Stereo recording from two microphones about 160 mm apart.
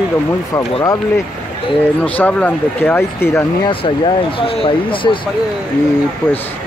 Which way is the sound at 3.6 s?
35° left (ahead or behind).